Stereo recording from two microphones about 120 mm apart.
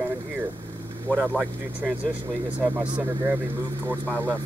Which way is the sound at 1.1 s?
10° right (ahead or behind).